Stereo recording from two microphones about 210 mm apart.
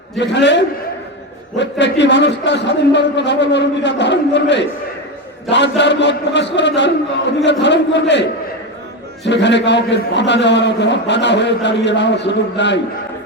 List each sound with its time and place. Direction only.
0.2 s a man's voice: 55° left (ahead or behind)